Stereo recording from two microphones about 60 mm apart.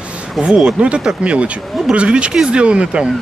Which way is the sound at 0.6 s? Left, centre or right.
Centre.